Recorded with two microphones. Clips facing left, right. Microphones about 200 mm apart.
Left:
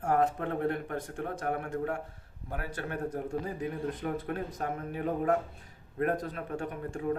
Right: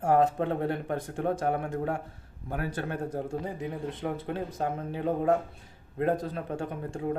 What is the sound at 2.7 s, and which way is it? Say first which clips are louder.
Speech: right 2 dB; 30° right (ahead or behind).